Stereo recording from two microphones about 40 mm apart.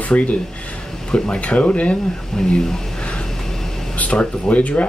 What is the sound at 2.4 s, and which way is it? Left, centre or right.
Speech, centre.